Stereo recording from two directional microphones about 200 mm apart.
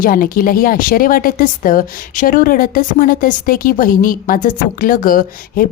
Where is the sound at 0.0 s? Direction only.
45° left (ahead or behind).